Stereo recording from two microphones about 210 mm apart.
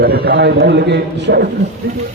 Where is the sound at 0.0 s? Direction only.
50° right (ahead or behind).